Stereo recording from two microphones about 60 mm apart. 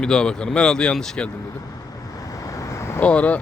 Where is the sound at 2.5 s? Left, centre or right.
Left.